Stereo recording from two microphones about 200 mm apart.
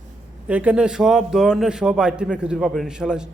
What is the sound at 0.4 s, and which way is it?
A man's voice, 5° right (ahead or behind).